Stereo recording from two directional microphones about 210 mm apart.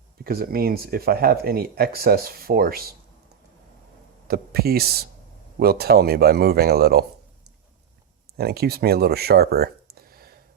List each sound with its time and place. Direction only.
0.3 s speech: 45° right (ahead or behind)
4.3 s speech: 45° right (ahead or behind)
8.4 s speech: 50° right (ahead or behind)